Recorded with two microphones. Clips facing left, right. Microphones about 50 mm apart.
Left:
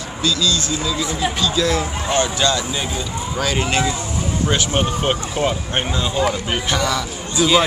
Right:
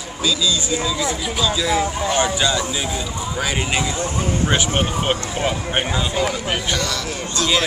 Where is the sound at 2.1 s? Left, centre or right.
Centre.